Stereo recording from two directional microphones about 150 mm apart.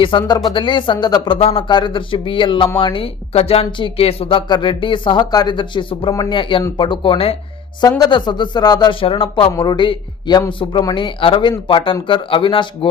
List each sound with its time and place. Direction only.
0.0 s speech: 30° left (ahead or behind)
7.8 s speech: 25° left (ahead or behind)